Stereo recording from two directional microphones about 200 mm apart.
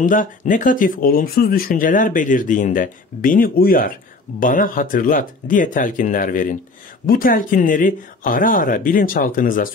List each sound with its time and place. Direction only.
0.0 s speech: 40° left (ahead or behind)